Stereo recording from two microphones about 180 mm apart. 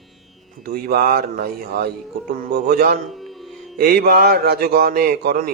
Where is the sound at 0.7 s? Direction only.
55° right (ahead or behind).